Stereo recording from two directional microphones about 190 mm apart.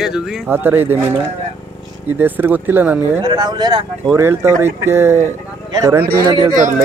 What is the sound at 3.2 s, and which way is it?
A man's voice, 20° right (ahead or behind).